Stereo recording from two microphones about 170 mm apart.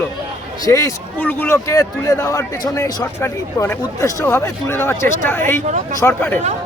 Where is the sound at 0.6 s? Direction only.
20° left (ahead or behind).